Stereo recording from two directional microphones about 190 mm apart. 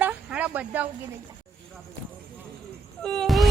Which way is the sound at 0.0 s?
5° right (ahead or behind).